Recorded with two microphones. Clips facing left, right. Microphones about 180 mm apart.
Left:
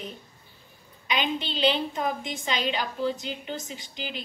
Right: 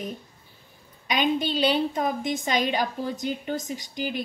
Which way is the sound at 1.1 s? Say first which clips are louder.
Right 5 dB; 45° right (ahead or behind).